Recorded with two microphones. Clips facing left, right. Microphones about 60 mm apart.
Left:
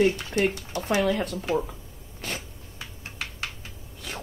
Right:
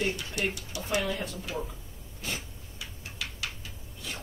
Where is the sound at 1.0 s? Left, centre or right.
Left.